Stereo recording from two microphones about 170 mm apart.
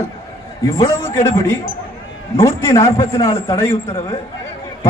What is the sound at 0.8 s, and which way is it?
A man's voice, 15° left (ahead or behind).